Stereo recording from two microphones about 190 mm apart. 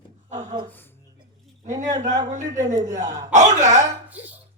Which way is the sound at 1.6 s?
40° right (ahead or behind).